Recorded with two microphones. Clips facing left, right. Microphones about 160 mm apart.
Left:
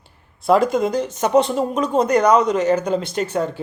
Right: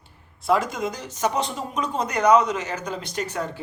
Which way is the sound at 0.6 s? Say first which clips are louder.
Left 10 dB; 60° left (ahead or behind).